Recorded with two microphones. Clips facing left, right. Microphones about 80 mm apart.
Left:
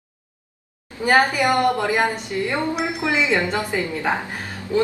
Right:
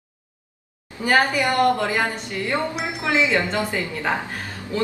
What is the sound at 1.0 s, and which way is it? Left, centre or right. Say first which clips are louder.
A woman's voice: left 2 dB; centre.